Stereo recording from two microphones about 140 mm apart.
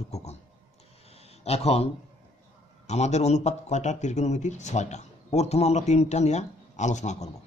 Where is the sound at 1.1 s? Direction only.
50° left (ahead or behind).